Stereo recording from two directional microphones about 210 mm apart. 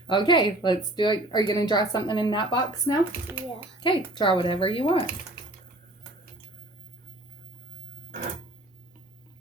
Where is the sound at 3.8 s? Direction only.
25° left (ahead or behind).